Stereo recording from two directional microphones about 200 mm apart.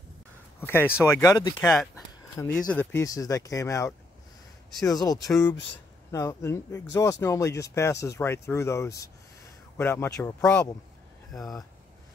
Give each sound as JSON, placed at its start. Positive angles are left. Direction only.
{"t": 0.6, "sound": "speech", "side_deg": 10}
{"t": 1.7, "sound": "speech", "side_deg": 0}
{"t": 11.3, "sound": "speech", "side_deg": 0}